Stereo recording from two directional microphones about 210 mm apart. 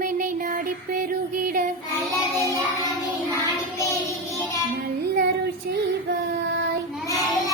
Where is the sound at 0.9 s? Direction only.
40° right (ahead or behind).